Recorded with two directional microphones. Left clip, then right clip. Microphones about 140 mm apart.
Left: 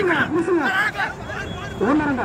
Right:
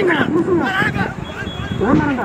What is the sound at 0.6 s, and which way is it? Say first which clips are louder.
Speech: right 2 dB; 10° left (ahead or behind).